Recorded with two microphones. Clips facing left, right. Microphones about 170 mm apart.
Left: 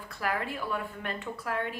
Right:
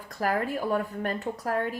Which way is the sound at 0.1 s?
40° right (ahead or behind).